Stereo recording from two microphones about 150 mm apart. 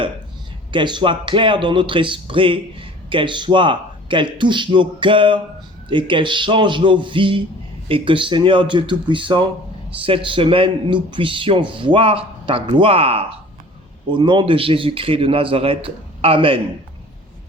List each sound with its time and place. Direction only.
0.7 s speech: 30° right (ahead or behind)